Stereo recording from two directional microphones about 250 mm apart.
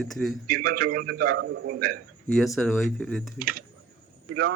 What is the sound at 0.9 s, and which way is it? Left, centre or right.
A man's voice, right.